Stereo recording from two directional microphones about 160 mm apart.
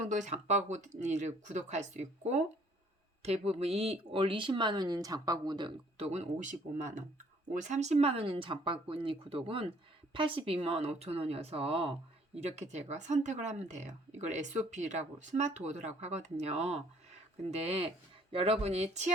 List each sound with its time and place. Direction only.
0.1 s speech: 50° right (ahead or behind); by 6.1 s 30° right (ahead or behind)
6.1 s speech: 45° right (ahead or behind)